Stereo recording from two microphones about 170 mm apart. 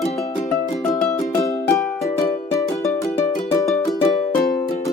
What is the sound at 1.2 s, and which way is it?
Music, 20° left (ahead or behind).